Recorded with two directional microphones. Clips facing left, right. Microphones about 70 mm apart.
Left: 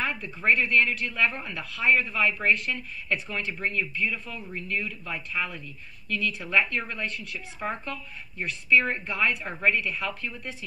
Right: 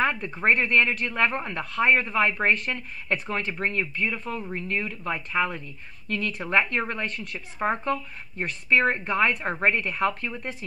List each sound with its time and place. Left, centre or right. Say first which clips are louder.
0.0 s speech: right 4 dB; right